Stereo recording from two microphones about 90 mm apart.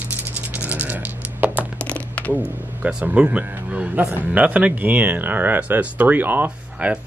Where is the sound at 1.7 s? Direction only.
15° left (ahead or behind).